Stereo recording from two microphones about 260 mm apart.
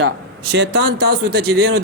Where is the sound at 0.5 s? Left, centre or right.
Right.